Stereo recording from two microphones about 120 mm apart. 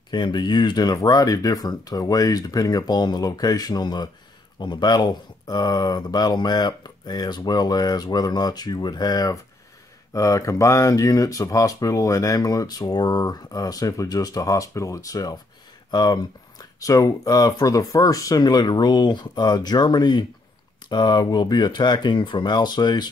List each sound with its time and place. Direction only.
0.1 s speech: 40° left (ahead or behind)